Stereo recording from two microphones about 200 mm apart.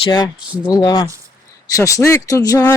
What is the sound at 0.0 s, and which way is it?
Speech, 20° left (ahead or behind).